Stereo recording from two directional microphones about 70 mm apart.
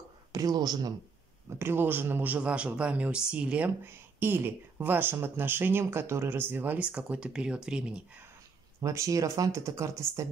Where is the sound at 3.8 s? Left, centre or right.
Right.